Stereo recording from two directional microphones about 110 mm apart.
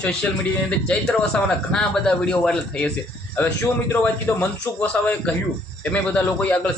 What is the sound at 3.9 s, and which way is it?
A man's voice, 15° left (ahead or behind).